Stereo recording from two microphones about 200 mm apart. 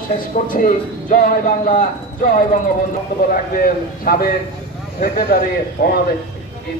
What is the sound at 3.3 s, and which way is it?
A man's voice, 45° left (ahead or behind).